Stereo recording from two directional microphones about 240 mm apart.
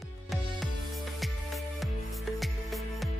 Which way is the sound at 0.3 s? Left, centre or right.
Centre.